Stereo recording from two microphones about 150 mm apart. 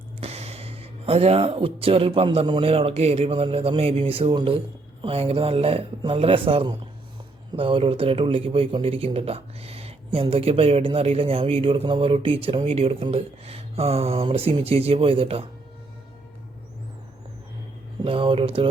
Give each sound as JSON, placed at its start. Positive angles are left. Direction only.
{"t": 0.2, "sound": "speech", "side_deg": -45}
{"t": 18.0, "sound": "speech", "side_deg": -35}